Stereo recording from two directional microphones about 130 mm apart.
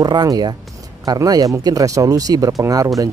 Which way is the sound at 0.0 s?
30° right (ahead or behind).